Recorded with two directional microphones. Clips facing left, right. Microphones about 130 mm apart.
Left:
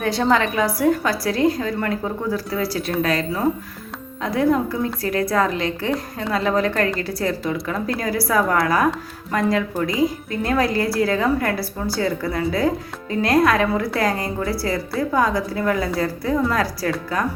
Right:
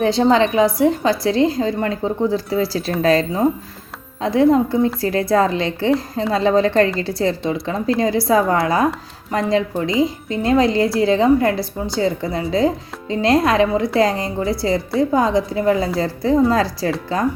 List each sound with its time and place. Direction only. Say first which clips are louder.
0.0 s speech: right 4 dB; 25° right (ahead or behind)